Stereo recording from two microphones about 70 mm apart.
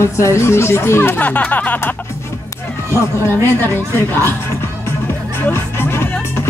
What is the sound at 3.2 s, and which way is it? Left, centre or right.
Speech, left.